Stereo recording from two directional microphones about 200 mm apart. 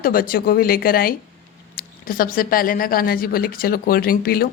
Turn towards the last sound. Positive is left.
turn(degrees=50)  # may be behind; listen again after turning